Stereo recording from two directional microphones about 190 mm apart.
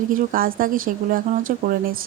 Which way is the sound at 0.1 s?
45° right (ahead or behind).